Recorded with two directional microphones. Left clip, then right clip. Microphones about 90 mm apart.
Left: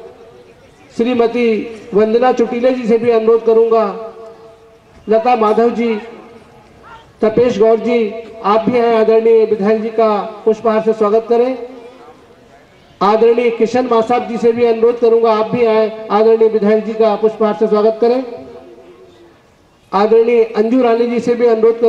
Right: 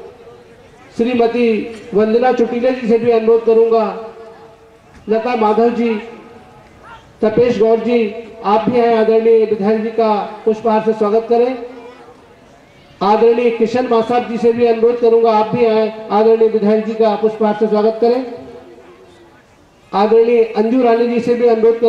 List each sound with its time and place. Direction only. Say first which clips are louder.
0.9 s a man's voice: even; 30° left (ahead or behind)
5.1 s a man's voice: left 3 dB; 30° left (ahead or behind)
7.2 s a man's voice: left 1 dB; 30° left (ahead or behind)
13.0 s a man's voice: left 1 dB; 30° left (ahead or behind)
19.9 s a man's voice: left 1 dB; 30° left (ahead or behind)